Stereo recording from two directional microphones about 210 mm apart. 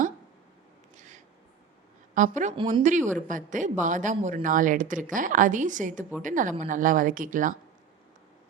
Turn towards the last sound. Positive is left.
turn(degrees=-40)  # may be behind; listen again after turning